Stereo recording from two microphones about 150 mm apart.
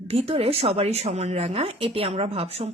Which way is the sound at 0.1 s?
40° right (ahead or behind).